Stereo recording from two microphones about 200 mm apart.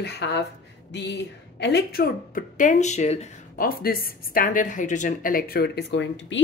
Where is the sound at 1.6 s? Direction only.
55° left (ahead or behind); by 3.6 s 35° left (ahead or behind).